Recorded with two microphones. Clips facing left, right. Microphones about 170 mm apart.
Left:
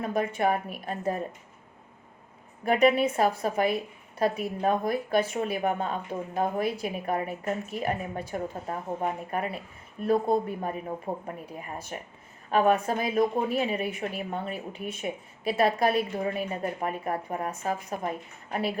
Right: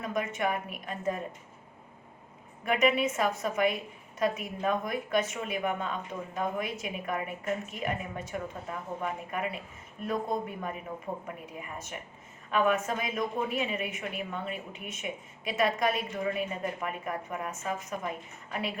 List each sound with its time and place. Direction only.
0.0 s speech: 30° left (ahead or behind)
2.6 s speech: 35° left (ahead or behind)